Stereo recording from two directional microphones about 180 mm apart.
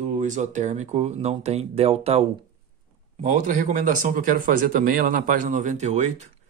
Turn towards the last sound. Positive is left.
turn(degrees=-40)  # may be behind; listen again after turning